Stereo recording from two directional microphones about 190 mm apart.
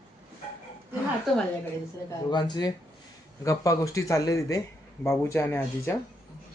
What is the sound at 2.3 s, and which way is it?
Speech, 20° left (ahead or behind).